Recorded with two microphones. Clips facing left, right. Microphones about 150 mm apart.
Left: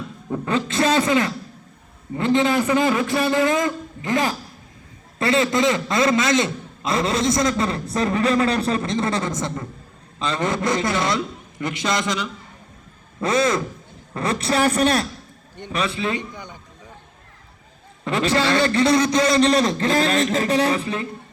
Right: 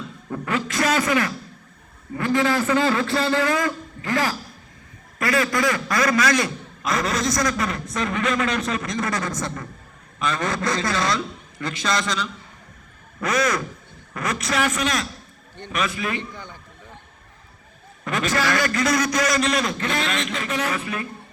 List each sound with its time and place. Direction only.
0.3 s a sound: 25° left (ahead or behind)
2.1 s a man's voice: 25° left (ahead or behind)
18.0 s a man's voice: 30° left (ahead or behind)